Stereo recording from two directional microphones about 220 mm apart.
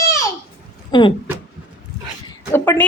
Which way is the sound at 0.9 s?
20° left (ahead or behind).